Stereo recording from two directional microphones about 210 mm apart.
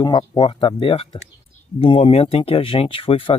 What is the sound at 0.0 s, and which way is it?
Speech, 20° left (ahead or behind).